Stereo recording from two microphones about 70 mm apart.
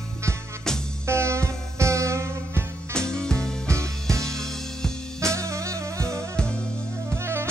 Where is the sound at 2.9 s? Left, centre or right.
Centre.